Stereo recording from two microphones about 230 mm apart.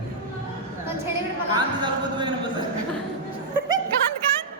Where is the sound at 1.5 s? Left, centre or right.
Centre.